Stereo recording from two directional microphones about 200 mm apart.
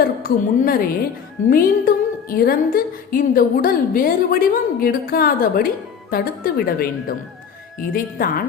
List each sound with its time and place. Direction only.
0.0 s a woman's voice: 45° left (ahead or behind)